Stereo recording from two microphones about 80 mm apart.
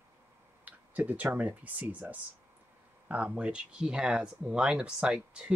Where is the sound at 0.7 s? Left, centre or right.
Centre.